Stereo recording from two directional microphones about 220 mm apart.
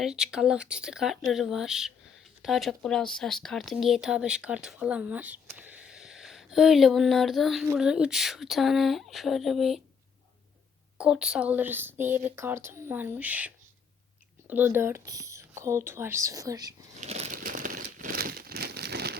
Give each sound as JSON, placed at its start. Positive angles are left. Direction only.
{"t": 0.0, "sound": "speech", "side_deg": 0}
{"t": 10.9, "sound": "speech", "side_deg": -5}
{"t": 17.0, "sound": "crumpling", "side_deg": -30}